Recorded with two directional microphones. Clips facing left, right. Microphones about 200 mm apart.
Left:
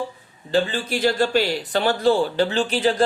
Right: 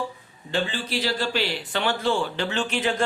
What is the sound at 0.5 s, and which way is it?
Speech, 45° left (ahead or behind).